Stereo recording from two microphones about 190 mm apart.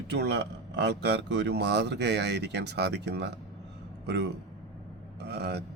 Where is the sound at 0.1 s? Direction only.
60° right (ahead or behind).